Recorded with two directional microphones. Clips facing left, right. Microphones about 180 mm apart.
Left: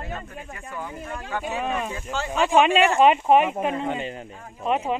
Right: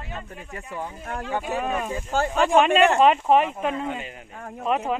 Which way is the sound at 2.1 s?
50° right (ahead or behind).